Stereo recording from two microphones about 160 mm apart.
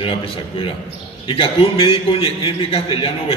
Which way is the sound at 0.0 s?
35° left (ahead or behind).